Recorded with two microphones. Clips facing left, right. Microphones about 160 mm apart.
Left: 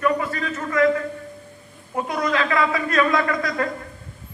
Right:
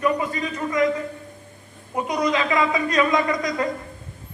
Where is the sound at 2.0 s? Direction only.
20° right (ahead or behind).